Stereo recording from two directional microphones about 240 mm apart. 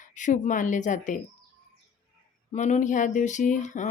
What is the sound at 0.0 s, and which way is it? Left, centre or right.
Speech, left.